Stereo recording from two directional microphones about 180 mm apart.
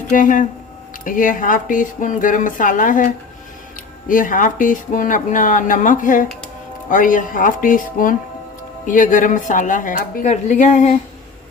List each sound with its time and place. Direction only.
0.1 s speech: 45° left (ahead or behind)
4.1 s speech: 50° left (ahead or behind)